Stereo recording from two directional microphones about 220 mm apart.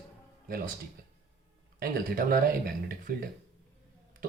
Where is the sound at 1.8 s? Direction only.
40° right (ahead or behind).